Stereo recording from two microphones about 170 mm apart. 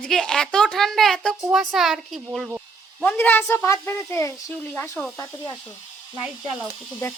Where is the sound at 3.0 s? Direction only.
10° left (ahead or behind).